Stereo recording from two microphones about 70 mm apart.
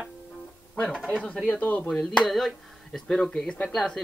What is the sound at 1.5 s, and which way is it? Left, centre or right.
Speech, left.